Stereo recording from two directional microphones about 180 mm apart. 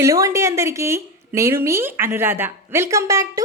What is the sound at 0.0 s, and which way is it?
A woman's voice, 15° right (ahead or behind).